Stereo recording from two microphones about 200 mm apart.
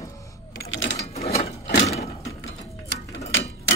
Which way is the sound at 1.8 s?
30° left (ahead or behind).